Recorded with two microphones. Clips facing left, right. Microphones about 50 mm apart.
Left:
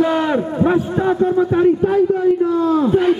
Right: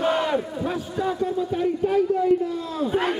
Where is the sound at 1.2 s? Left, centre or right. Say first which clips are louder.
Left 12 dB; left.